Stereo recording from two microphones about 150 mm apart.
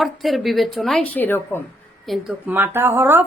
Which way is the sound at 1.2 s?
15° left (ahead or behind).